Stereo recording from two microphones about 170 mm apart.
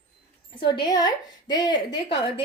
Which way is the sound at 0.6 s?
25° left (ahead or behind).